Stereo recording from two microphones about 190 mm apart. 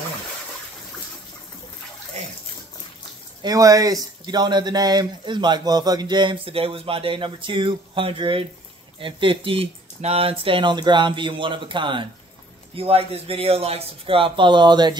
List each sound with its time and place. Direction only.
3.4 s speech: 20° right (ahead or behind)